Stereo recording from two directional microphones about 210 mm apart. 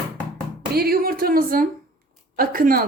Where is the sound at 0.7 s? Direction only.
45° right (ahead or behind).